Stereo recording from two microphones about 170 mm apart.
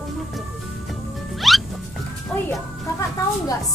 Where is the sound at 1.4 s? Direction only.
Centre (ahead or behind).